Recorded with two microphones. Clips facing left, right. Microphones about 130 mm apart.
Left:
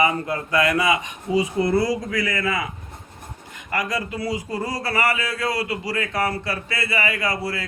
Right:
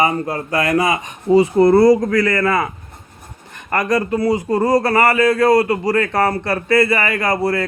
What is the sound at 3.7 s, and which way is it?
A man's voice, 55° right (ahead or behind).